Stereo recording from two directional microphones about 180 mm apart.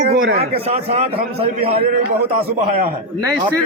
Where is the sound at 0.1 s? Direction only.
55° right (ahead or behind).